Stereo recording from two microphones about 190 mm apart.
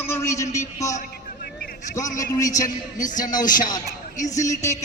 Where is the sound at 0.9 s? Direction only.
50° left (ahead or behind).